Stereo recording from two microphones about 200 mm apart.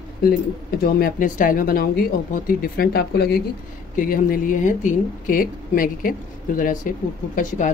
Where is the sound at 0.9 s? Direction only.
45° left (ahead or behind).